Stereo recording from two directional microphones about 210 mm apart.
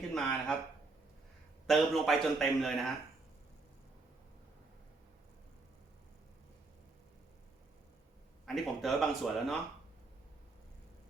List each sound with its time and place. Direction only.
0.1 s speech: 5° left (ahead or behind)
1.6 s a man's voice: centre (ahead or behind)
8.4 s a man's voice: centre (ahead or behind)